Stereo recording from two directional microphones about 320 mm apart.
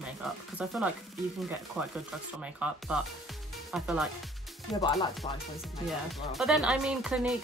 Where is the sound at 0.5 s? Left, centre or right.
Centre.